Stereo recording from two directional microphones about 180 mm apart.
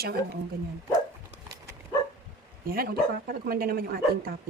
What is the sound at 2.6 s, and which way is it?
Speech, 55° right (ahead or behind).